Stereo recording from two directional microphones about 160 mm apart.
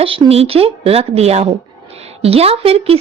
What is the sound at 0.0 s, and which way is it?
Speech, 35° right (ahead or behind).